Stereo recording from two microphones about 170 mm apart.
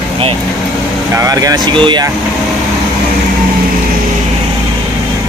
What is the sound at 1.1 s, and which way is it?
Speech, 20° right (ahead or behind).